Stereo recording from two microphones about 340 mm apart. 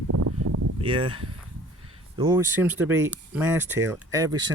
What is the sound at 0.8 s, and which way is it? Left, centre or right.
Speech, centre.